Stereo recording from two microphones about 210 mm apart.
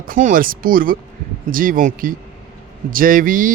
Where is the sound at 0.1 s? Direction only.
40° right (ahead or behind).